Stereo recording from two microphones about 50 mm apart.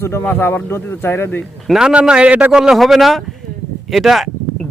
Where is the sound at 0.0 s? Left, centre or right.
Left.